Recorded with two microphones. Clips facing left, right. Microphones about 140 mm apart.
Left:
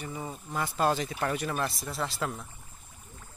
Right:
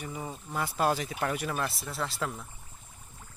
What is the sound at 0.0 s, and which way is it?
Speech, 5° right (ahead or behind).